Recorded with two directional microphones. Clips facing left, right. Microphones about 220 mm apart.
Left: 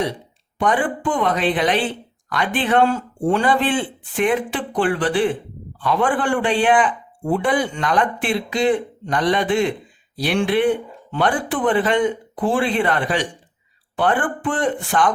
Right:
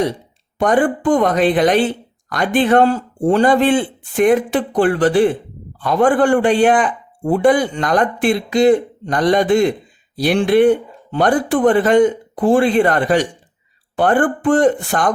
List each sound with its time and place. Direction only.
0.6 s a man's voice: 45° right (ahead or behind)